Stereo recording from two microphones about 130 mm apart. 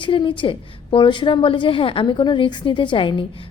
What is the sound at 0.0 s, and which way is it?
A woman's voice, 40° left (ahead or behind).